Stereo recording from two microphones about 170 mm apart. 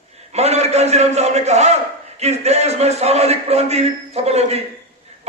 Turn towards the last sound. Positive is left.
turn(degrees=-40)  # may be behind; listen again after turning